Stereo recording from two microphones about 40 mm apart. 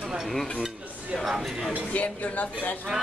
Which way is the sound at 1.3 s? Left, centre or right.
Centre.